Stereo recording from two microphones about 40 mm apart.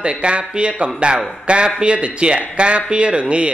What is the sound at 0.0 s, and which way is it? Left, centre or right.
Speech, right.